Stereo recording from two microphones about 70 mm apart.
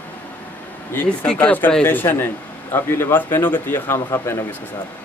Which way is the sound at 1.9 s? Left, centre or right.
Left.